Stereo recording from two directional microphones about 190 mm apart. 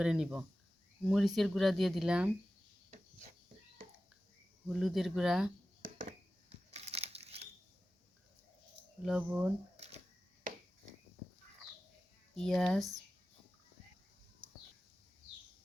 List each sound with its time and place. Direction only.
0.0 s speech: 5° right (ahead or behind)
4.7 s speech: centre (ahead or behind)
5.8 s a sound: 45° right (ahead or behind)
6.5 s crumpling: 35° right (ahead or behind)
9.0 s speech: 5° right (ahead or behind)
9.7 s camera: 35° right (ahead or behind)
12.3 s speech: 5° left (ahead or behind)